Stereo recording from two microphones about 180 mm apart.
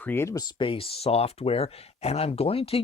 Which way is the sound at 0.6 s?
30° left (ahead or behind).